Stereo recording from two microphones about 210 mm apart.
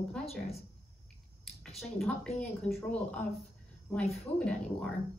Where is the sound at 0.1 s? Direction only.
Centre (ahead or behind).